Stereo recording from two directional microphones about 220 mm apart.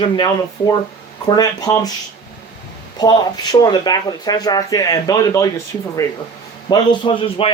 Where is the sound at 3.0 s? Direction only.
20° left (ahead or behind).